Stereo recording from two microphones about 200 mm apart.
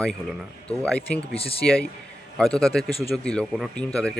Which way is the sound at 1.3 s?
30° left (ahead or behind).